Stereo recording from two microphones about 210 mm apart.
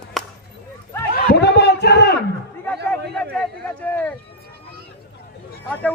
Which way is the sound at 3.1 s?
5° left (ahead or behind).